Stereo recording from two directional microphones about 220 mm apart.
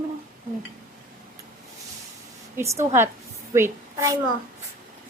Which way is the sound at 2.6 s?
15° right (ahead or behind).